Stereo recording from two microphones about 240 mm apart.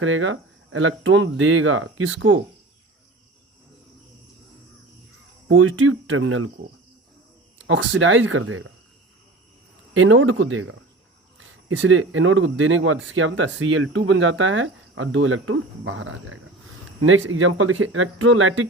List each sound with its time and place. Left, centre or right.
0.0 s speech: right
5.5 s speech: right
7.7 s speech: right
9.9 s speech: right